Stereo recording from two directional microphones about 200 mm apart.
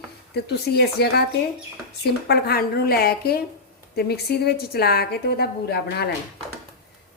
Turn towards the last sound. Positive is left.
turn(degrees=55)  # may be behind; listen again after turning